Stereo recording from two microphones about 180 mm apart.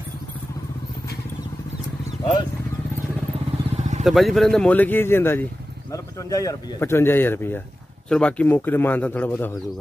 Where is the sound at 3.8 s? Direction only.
40° right (ahead or behind).